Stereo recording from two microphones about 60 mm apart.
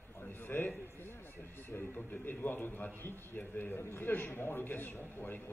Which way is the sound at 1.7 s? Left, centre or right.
Left.